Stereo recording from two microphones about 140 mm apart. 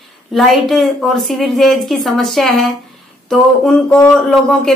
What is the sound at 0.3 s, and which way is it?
Speech, centre (ahead or behind).